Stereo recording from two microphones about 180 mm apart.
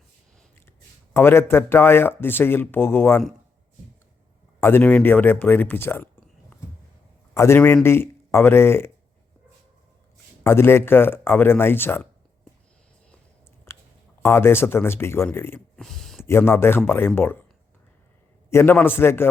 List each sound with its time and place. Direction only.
1.1 s speech: 15° left (ahead or behind)
4.6 s speech: 10° left (ahead or behind)
7.3 s speech: 15° left (ahead or behind)
10.4 s speech: 15° left (ahead or behind)
13.7 s a sound: 15° left (ahead or behind)
14.2 s speech: 15° left (ahead or behind)
15.7 s a sound: centre (ahead or behind)
16.2 s speech: 15° left (ahead or behind)
18.5 s speech: 10° left (ahead or behind)